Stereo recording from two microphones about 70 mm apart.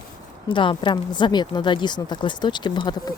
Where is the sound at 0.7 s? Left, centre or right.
Left.